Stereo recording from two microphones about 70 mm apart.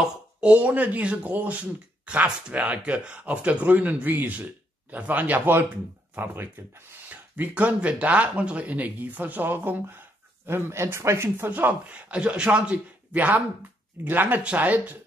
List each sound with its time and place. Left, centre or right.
0.0 s speech: centre; by 11.5 s right
11.5 s speech: right